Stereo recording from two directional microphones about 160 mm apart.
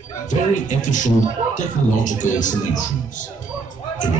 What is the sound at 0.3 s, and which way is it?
Speech, 50° left (ahead or behind).